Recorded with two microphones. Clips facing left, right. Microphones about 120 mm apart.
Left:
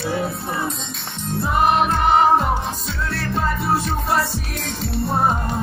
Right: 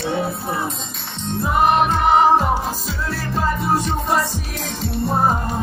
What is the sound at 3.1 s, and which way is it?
Music, centre (ahead or behind).